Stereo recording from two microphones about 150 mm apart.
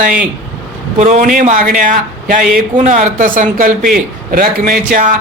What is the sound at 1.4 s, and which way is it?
A man's voice, 60° right (ahead or behind).